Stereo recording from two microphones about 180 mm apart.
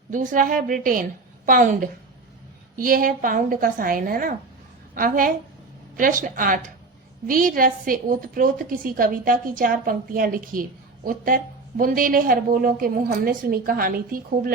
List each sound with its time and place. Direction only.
0.1 s a woman's voice: 45° right (ahead or behind)